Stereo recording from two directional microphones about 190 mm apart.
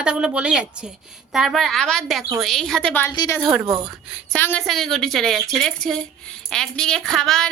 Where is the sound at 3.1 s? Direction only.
20° left (ahead or behind).